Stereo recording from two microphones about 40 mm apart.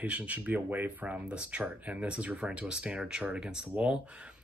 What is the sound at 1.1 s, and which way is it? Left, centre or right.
Speech, right.